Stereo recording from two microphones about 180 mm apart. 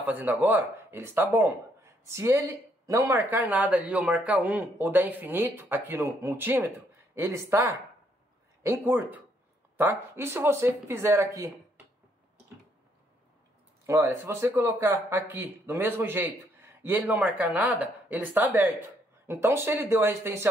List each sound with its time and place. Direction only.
0.0 s speech: 10° right (ahead or behind)
13.8 s speech: 15° right (ahead or behind)